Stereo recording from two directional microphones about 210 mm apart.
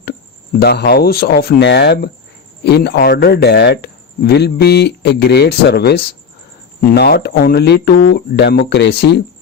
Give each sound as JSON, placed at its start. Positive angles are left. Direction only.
{"t": 0.6, "sound": "speech", "side_deg": 50}